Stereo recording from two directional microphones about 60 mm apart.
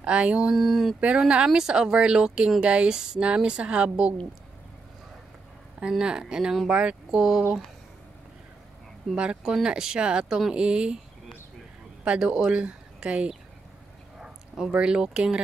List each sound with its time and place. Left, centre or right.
0.0 s a sound: centre
0.6 s a sound: centre
1.0 s a woman's voice: centre
5.8 s a woman's voice: centre
9.1 s a woman's voice: centre
12.0 s speech: centre
14.7 s a woman's voice: centre